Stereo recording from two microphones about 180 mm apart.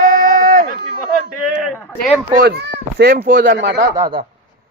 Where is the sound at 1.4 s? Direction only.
Centre (ahead or behind).